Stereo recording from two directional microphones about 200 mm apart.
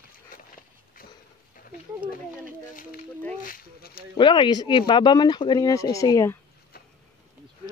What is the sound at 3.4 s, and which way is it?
Speech, 45° left (ahead or behind).